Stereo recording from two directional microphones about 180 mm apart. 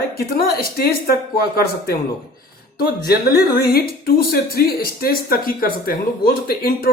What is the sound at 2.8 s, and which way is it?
Speech, 60° left (ahead or behind).